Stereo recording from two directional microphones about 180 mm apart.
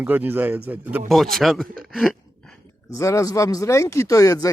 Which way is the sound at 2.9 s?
15° left (ahead or behind).